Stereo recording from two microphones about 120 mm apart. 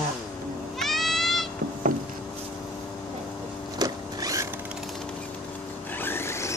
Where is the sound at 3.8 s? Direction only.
30° right (ahead or behind).